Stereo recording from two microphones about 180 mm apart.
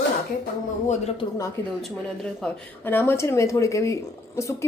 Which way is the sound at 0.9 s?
35° left (ahead or behind).